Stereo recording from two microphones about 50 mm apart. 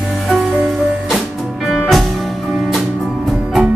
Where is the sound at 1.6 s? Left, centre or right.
Centre.